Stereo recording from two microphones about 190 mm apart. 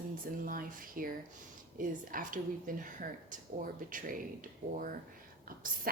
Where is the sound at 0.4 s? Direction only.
45° right (ahead or behind).